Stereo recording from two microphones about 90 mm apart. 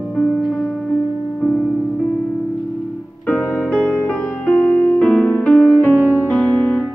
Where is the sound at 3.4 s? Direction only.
Centre (ahead or behind).